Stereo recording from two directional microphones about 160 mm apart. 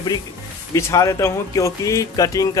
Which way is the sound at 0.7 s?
20° left (ahead or behind).